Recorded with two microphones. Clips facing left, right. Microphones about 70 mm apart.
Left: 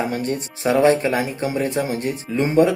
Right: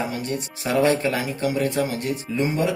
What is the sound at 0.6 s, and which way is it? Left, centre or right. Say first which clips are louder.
Speech: left 4 dB; left.